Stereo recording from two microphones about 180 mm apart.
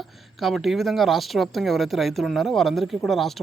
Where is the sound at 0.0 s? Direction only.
Centre (ahead or behind).